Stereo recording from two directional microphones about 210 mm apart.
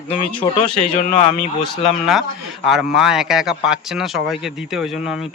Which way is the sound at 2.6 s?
Centre (ahead or behind).